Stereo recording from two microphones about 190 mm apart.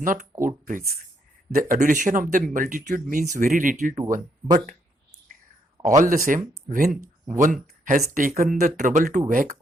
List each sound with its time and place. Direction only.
0.0 s speech: 45° right (ahead or behind)
6.0 s speech: 45° right (ahead or behind)